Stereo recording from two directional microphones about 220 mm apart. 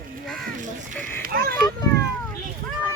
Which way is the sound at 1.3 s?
45° right (ahead or behind).